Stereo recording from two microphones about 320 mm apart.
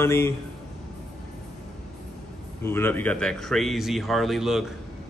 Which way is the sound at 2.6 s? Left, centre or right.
Centre.